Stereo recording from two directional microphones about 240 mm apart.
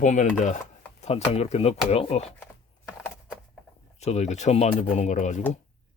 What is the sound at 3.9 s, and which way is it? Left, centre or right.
Speech, left.